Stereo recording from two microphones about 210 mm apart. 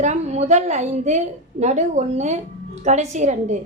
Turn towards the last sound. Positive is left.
turn(degrees=-35)  # may be behind; listen again after turning